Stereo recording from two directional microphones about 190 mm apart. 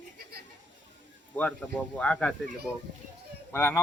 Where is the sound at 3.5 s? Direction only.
10° left (ahead or behind).